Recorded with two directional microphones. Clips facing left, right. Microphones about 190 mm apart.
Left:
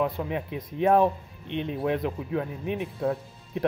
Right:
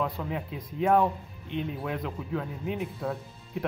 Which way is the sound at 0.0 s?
20° left (ahead or behind).